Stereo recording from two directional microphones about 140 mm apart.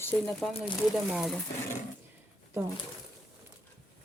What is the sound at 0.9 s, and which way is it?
Speech, centre (ahead or behind).